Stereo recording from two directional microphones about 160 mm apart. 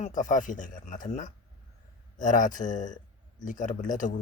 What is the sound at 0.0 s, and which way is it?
A man's voice, 55° left (ahead or behind).